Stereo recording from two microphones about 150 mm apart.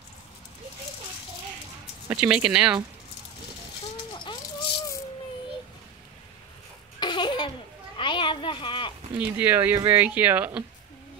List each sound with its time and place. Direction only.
2.0 s speech: 10° right (ahead or behind)
4.1 s rattle: 30° left (ahead or behind)
7.0 s laughter: 30° left (ahead or behind)
8.0 s a sound: 30° left (ahead or behind)
9.2 s speech: 10° right (ahead or behind)